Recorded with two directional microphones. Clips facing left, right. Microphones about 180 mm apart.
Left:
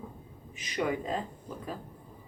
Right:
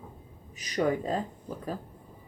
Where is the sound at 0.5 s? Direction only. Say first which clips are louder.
Right 4 dB; 40° right (ahead or behind).